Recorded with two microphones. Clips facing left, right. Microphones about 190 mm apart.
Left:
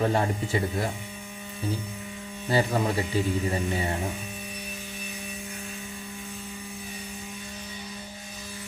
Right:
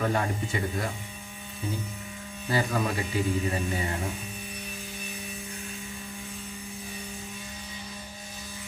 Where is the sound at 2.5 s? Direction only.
30° left (ahead or behind).